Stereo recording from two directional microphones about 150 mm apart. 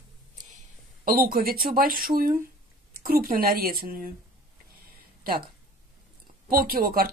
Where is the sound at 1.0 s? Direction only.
75° right (ahead or behind).